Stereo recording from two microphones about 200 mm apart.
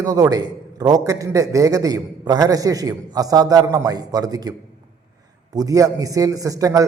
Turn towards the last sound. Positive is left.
turn(degrees=-15)  # may be behind; listen again after turning